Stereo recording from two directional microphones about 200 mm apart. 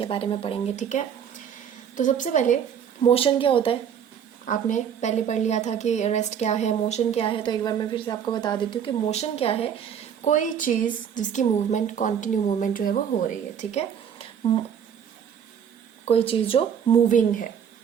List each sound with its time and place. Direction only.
0.0 s a woman's voice: 25° left (ahead or behind)
3.0 s speech: 30° left (ahead or behind)
4.4 s a woman's voice: 35° left (ahead or behind)
10.2 s a woman's voice: 40° left (ahead or behind)
13.6 s a sound: 35° left (ahead or behind)
16.0 s speech: 30° left (ahead or behind)
17.1 s a woman's voice: 40° left (ahead or behind)